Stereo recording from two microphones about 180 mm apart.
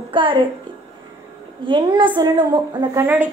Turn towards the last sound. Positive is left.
turn(degrees=-10)  # may be behind; listen again after turning